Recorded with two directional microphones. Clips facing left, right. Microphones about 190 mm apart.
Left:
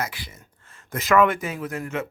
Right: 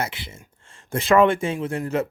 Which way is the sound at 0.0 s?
25° right (ahead or behind).